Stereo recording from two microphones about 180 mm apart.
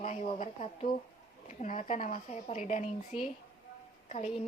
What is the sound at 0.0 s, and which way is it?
Speech, 40° left (ahead or behind).